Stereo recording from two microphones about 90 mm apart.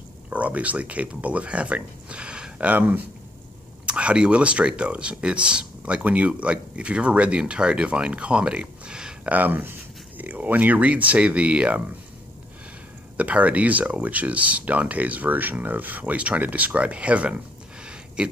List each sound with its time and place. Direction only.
0.3 s speech: 15° right (ahead or behind)
13.2 s speech: 15° right (ahead or behind)
17.8 s a sound: 10° right (ahead or behind)